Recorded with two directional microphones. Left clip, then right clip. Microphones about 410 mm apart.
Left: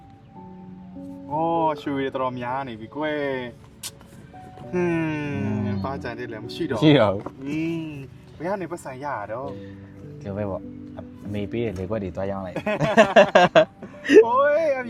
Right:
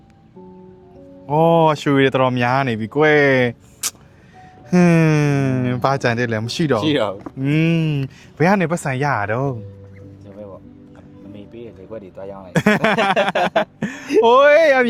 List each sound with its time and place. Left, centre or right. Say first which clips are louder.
1.3 s speech: right 8 dB; right
6.8 s speech: left 2 dB; left
7.4 s speech: right 10 dB; right
11.3 s speech: left 10 dB; left
12.5 s speech: right 11 dB; right
13.1 s speech: left 3 dB; left
14.3 s speech: right 9 dB; right